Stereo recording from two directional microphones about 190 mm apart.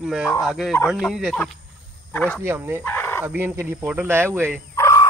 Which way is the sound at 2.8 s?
10° left (ahead or behind).